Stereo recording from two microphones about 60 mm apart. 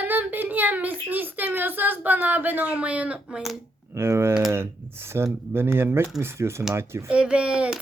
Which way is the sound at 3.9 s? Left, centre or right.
Right.